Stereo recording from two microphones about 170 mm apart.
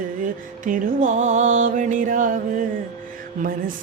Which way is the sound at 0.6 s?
50° right (ahead or behind).